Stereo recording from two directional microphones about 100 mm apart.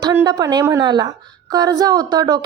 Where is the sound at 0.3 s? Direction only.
40° right (ahead or behind).